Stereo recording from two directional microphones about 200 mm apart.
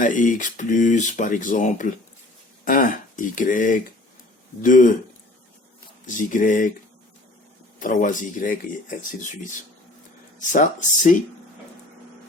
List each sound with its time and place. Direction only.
0.0 s speech: 40° left (ahead or behind)
6.1 s speech: 40° left (ahead or behind)
7.8 s speech: 40° left (ahead or behind)